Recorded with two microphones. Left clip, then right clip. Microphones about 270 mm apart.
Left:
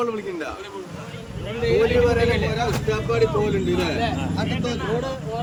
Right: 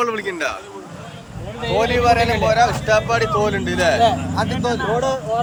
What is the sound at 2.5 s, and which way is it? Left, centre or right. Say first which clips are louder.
Speech: right 9 dB; centre.